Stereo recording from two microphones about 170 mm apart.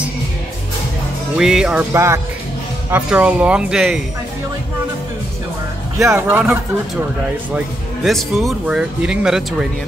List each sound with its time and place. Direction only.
1.3 s speech: 5° right (ahead or behind)
2.0 s speech: 15° right (ahead or behind)
5.9 s speech: 15° right (ahead or behind)
7.5 s speech: centre (ahead or behind)